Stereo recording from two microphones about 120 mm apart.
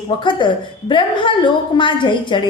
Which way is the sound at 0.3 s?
40° left (ahead or behind).